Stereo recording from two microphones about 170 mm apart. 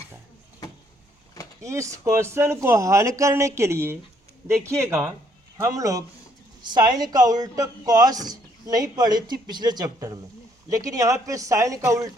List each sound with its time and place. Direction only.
1.6 s speech: 15° right (ahead or behind)